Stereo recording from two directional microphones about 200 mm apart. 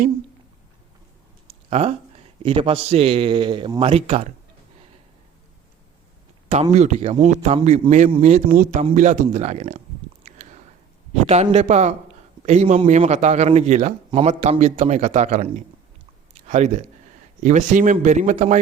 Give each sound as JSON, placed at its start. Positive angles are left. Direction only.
{"t": 1.7, "sound": "speech", "side_deg": -30}
{"t": 6.5, "sound": "a man's voice", "side_deg": -35}
{"t": 10.2, "sound": "a sound", "side_deg": -35}
{"t": 11.1, "sound": "a man's voice", "side_deg": -35}
{"t": 16.5, "sound": "a man's voice", "side_deg": -35}